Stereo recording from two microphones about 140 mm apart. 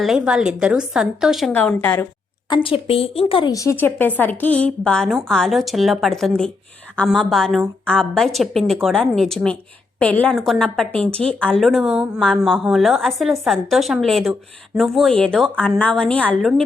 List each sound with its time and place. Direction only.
0.0 s speech: 5° right (ahead or behind)
1.5 s a woman's voice: 10° left (ahead or behind)
2.5 s speech: 35° left (ahead or behind)
3.5 s a woman's voice: 20° left (ahead or behind)